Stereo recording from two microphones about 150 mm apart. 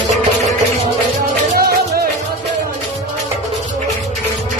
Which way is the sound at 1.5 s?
90° right.